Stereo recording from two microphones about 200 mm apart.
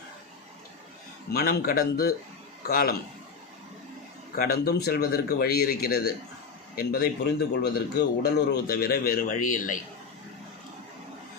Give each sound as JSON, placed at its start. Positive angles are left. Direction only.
{"t": 1.3, "sound": "a man's voice", "side_deg": 50}
{"t": 4.4, "sound": "a man's voice", "side_deg": 50}